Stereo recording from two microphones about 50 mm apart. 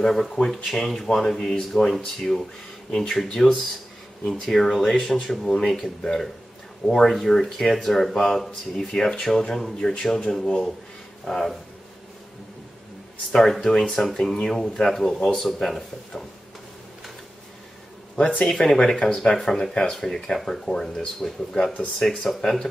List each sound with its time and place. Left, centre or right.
0.0 s speech: centre
6.9 s speech: centre
13.3 s speech: centre
18.1 s speech: centre